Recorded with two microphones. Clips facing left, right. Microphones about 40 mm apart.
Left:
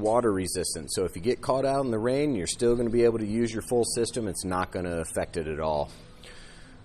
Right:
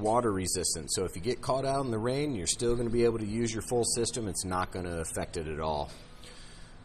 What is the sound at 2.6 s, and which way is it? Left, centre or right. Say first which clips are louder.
Speech: left 6 dB; left.